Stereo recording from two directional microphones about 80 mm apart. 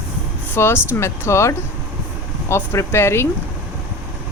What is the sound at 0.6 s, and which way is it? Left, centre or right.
Speech, left.